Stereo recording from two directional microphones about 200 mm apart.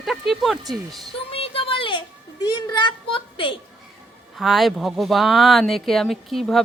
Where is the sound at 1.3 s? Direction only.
30° left (ahead or behind).